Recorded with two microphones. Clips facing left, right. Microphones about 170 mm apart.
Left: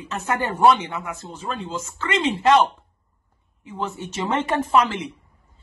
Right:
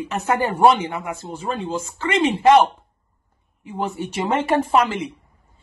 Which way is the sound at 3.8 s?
10° right (ahead or behind).